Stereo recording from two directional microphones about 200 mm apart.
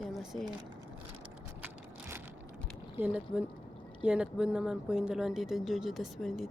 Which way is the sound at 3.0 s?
5° right (ahead or behind).